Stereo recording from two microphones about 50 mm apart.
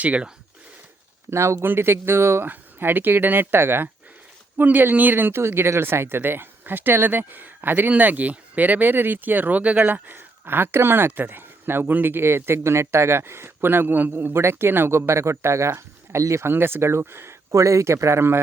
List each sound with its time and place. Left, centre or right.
0.0 s speech: right
1.3 s speech: right
1.6 s speech: right
2.5 s speech: right
16.5 s speech: right